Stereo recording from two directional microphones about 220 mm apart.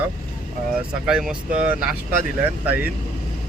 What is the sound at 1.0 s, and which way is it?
Speech, 5° right (ahead or behind).